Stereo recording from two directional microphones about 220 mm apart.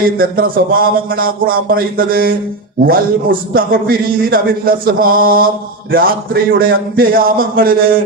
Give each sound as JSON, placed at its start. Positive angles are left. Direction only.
{"t": 0.2, "sound": "a man's voice", "side_deg": -40}